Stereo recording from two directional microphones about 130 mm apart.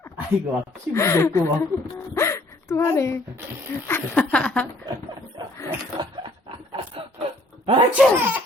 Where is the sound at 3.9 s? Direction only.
15° left (ahead or behind).